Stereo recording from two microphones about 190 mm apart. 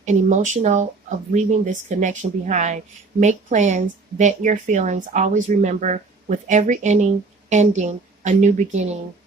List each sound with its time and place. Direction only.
0.0 s speech: 40° right (ahead or behind)